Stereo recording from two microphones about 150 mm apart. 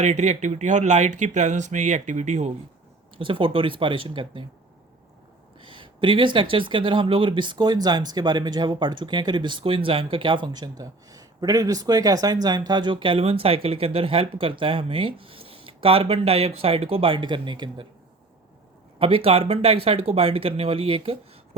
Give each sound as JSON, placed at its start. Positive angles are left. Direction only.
{"t": 0.0, "sound": "speech", "side_deg": -50}
{"t": 3.2, "sound": "speech", "side_deg": -35}
{"t": 5.5, "sound": "speech", "side_deg": -35}
{"t": 18.9, "sound": "speech", "side_deg": -40}